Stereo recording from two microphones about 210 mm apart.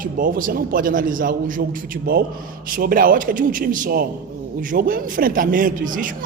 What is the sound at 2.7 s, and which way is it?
Speech, 45° right (ahead or behind).